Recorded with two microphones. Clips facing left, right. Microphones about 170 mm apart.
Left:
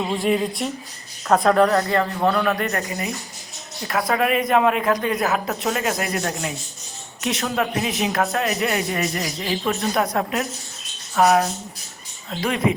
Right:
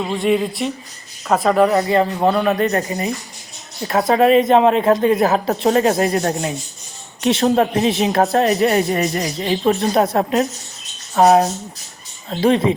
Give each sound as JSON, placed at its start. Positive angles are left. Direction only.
{"t": 0.0, "sound": "speech", "side_deg": 0}
{"t": 1.9, "sound": "a woman's voice", "side_deg": -20}